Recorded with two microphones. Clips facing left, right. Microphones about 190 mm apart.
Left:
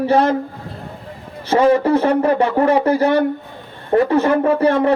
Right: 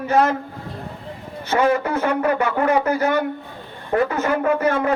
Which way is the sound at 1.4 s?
30° left (ahead or behind).